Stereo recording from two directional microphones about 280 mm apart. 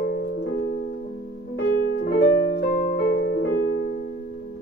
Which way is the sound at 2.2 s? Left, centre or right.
Left.